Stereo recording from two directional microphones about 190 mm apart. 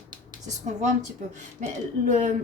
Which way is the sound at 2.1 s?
40° right (ahead or behind).